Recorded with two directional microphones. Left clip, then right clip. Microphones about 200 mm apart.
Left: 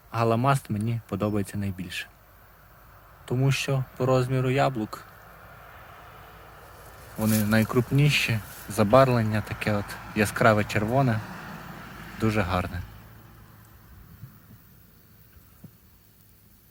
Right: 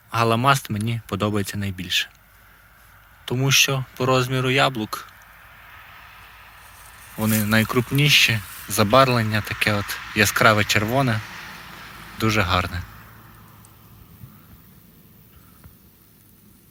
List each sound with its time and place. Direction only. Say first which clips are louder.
0.1 s speech: right 5 dB; centre (ahead or behind)
3.2 s speech: right 9 dB; centre (ahead or behind)
5.1 s vehicle: right 2 dB; 55° left (ahead or behind)
7.2 s speech: right 4 dB; centre (ahead or behind)
11.2 s a sound: right 4 dB; 25° left (ahead or behind)
12.1 s a man's voice: right 6 dB; centre (ahead or behind)